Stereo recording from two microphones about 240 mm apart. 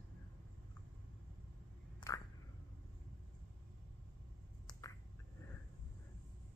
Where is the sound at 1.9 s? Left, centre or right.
Centre.